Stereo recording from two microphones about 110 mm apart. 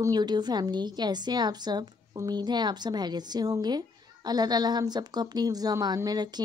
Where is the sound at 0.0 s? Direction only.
40° right (ahead or behind).